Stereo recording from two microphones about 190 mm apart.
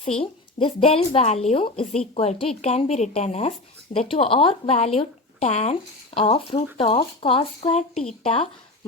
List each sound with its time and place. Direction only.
0.2 s speech: 30° left (ahead or behind)